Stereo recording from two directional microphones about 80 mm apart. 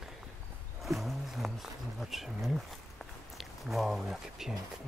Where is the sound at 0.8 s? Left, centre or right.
Centre.